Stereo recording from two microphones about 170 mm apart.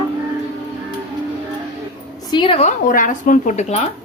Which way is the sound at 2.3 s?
30° left (ahead or behind).